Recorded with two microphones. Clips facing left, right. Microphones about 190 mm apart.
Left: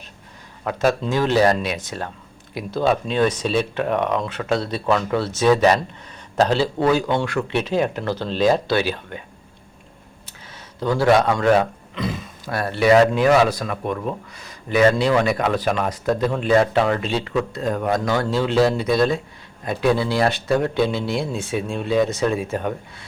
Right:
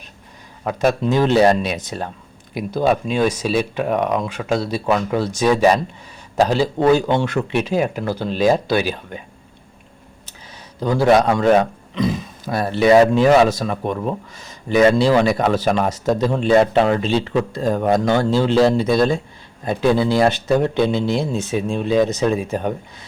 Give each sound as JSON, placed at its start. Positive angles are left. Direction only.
{"t": 0.6, "sound": "speech", "side_deg": -20}
{"t": 7.6, "sound": "speech", "side_deg": -10}
{"t": 10.8, "sound": "a man's voice", "side_deg": -15}